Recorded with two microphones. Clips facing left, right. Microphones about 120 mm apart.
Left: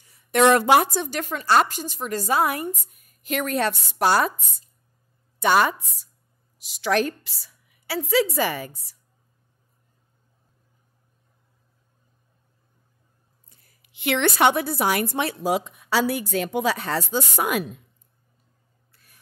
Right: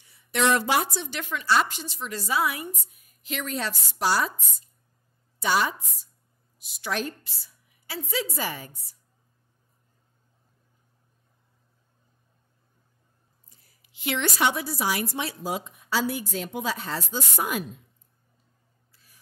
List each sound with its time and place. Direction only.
0.0 s a woman's voice: 45° left (ahead or behind)
5.4 s a woman's voice: 60° left (ahead or behind)
6.6 s a woman's voice: 90° left
13.8 s a woman's voice: 65° left (ahead or behind)
18.9 s a sound: 60° left (ahead or behind)